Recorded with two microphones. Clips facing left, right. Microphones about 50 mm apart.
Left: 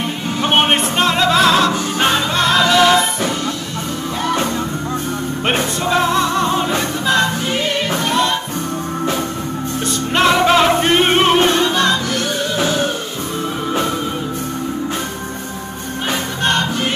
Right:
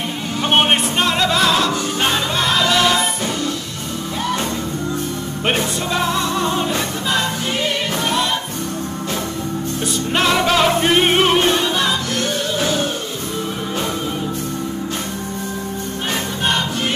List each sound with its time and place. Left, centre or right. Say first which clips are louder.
0.4 s music: left 1 dB; centre
5.5 s music: left 2 dB; centre
5.9 s music: left 4 dB; centre
9.8 s music: left 3 dB; centre
12.5 s music: left 3 dB; left
16.4 s music: left 3 dB; centre